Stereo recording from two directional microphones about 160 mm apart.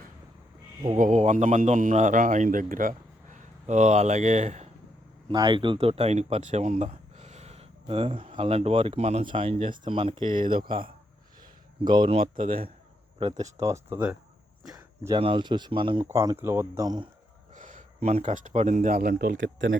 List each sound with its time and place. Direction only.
0.9 s speech: 50° right (ahead or behind)
5.3 s speech: 30° right (ahead or behind); by 13.5 s 45° right (ahead or behind)
13.6 s speech: 20° right (ahead or behind)
14.6 s a sound: 5° right (ahead or behind)
15.2 s speech: 30° right (ahead or behind)
16.0 s speech: 20° right (ahead or behind)
17.5 s speech: 55° right (ahead or behind); by 19.4 s 70° right (ahead or behind)